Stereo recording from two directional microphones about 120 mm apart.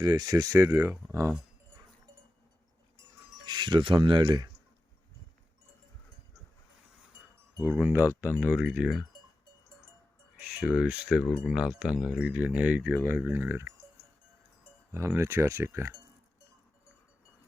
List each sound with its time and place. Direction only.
0.0 s speech: 35° right (ahead or behind)
3.4 s speech: 40° right (ahead or behind)
7.6 s speech: 15° right (ahead or behind)
10.4 s speech: 10° right (ahead or behind)
13.1 s speech: 20° right (ahead or behind)
14.9 s speech: 25° right (ahead or behind)